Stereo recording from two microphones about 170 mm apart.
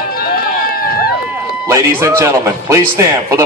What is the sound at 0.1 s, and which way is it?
Run, 60° left (ahead or behind).